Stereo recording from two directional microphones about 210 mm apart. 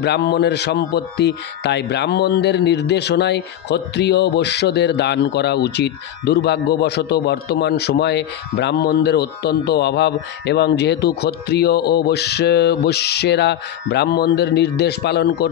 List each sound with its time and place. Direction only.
0.0 s speech: 55° left (ahead or behind)